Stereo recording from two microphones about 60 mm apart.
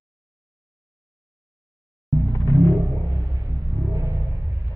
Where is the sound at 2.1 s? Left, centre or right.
Right.